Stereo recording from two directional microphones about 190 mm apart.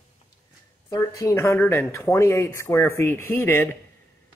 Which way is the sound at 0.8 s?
15° left (ahead or behind).